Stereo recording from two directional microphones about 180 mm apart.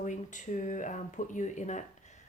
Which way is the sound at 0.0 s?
45° left (ahead or behind).